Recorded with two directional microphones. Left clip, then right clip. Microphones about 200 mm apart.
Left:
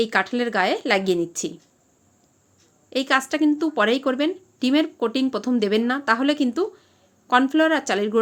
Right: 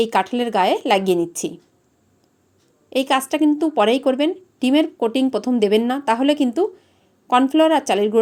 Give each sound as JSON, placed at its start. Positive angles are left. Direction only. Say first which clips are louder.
{"t": 0.0, "sound": "a woman's voice", "louder": "right 3 dB", "side_deg": -10}
{"t": 2.9, "sound": "a woman's voice", "louder": "right 2 dB", "side_deg": -10}